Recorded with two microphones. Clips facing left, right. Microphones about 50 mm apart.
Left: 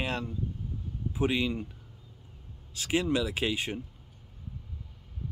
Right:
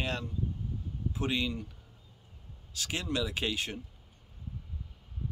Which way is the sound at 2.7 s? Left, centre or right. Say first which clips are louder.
Left 6 dB; centre.